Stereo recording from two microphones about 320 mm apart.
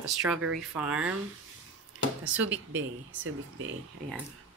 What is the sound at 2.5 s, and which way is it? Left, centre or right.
Speech, right.